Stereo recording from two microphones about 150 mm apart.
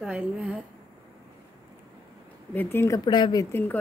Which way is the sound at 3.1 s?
30° left (ahead or behind).